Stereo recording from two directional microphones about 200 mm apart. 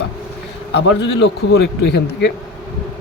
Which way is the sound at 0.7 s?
65° left (ahead or behind).